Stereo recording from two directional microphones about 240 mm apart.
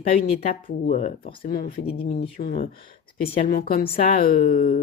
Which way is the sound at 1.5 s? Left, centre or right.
Left.